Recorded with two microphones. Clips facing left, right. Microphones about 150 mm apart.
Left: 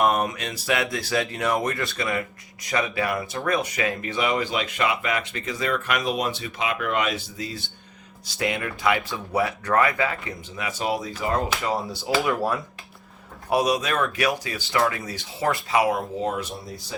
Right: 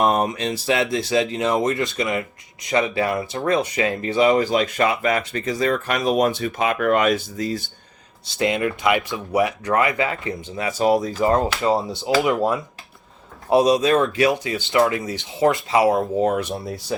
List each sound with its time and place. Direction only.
0.0 s speech: 30° right (ahead or behind)
8.4 s speech: 20° right (ahead or behind)
16.2 s speech: 60° right (ahead or behind)